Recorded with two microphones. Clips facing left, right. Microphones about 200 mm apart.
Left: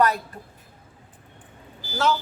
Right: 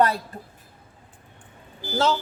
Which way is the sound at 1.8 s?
55° right (ahead or behind).